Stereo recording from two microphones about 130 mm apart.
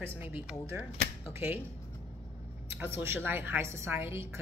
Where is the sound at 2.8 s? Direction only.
20° right (ahead or behind).